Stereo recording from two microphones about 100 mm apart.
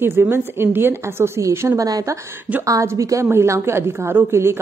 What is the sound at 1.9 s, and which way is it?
A woman's voice, 40° right (ahead or behind).